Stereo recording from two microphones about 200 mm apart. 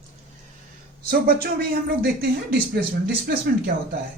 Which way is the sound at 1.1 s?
50° right (ahead or behind).